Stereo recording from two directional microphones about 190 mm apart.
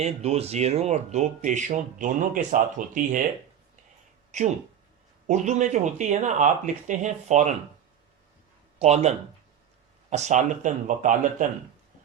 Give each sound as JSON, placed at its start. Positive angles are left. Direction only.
{"t": 0.0, "sound": "speech", "side_deg": -35}
{"t": 4.3, "sound": "speech", "side_deg": -40}
{"t": 8.8, "sound": "speech", "side_deg": -35}